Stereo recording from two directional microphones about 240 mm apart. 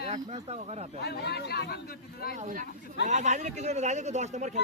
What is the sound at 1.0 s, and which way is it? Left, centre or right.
Speech, left.